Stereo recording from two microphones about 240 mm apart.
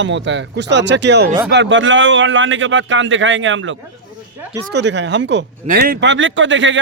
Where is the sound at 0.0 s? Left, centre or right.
Right.